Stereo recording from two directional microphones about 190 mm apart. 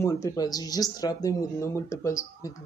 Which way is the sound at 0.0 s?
15° left (ahead or behind).